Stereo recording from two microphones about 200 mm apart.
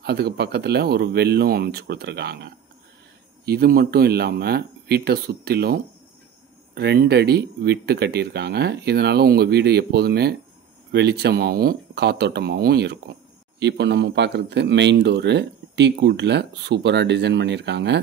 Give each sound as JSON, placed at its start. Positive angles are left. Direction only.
{"t": 0.0, "sound": "a man's voice", "side_deg": -55}